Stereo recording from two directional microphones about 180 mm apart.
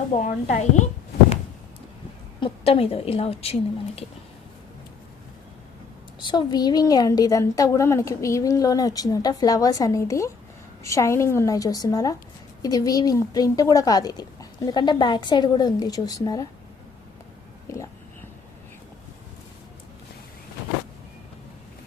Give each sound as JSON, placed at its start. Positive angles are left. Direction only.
{"t": 0.2, "sound": "speech", "side_deg": 45}
{"t": 2.4, "sound": "a woman's voice", "side_deg": 30}
{"t": 6.2, "sound": "a woman's voice", "side_deg": 25}
{"t": 17.7, "sound": "a woman's voice", "side_deg": 15}